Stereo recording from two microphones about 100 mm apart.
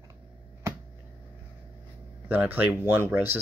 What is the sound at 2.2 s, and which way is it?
Speech, 20° right (ahead or behind).